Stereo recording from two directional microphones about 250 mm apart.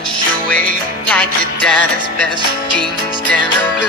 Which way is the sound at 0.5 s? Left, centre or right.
Centre.